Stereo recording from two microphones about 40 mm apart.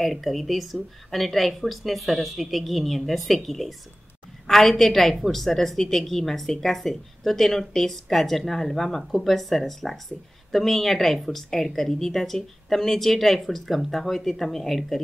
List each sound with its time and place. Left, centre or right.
0.0 s a woman's voice: centre